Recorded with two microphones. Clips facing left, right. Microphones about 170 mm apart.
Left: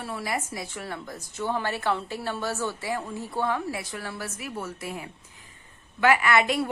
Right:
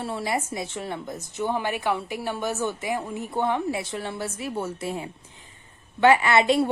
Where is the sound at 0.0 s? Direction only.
25° right (ahead or behind).